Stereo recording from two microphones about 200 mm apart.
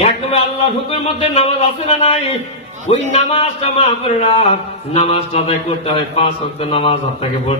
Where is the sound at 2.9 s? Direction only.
30° left (ahead or behind).